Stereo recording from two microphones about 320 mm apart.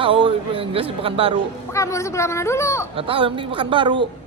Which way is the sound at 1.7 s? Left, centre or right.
Centre.